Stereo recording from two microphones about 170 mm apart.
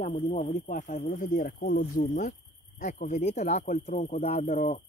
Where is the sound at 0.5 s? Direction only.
45° left (ahead or behind).